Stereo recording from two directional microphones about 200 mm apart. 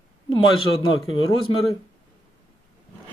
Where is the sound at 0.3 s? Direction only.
25° left (ahead or behind).